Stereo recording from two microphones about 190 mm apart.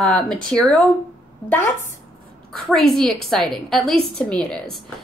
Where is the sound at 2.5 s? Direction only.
Centre (ahead or behind).